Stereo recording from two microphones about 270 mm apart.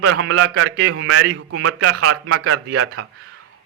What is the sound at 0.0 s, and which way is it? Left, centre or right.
A man's voice, right.